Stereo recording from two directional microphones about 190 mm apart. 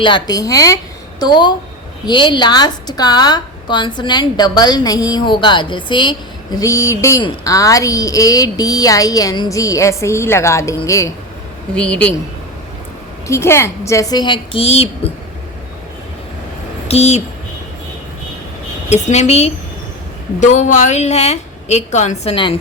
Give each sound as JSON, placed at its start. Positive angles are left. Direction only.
{"t": 0.0, "sound": "a woman's voice", "side_deg": 25}
{"t": 13.2, "sound": "a woman's voice", "side_deg": 15}
{"t": 16.9, "sound": "a woman's voice", "side_deg": 35}
{"t": 18.9, "sound": "a woman's voice", "side_deg": 40}